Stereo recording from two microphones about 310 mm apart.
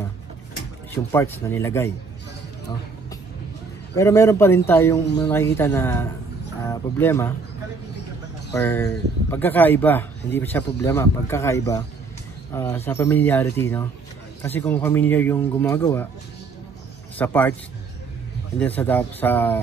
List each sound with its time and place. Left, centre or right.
1.1 s speech: centre
3.9 s speech: centre
8.5 s speech: centre
17.2 s a man's voice: centre
18.6 s speech: centre